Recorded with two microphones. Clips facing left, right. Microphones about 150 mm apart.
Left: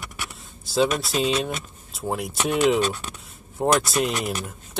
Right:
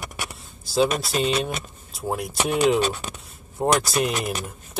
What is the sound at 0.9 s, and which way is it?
Speech, centre (ahead or behind).